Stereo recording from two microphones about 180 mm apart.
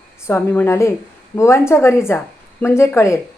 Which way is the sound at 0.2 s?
15° left (ahead or behind).